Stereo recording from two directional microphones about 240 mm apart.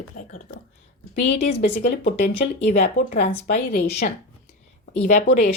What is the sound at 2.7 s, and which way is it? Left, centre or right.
Speech, left.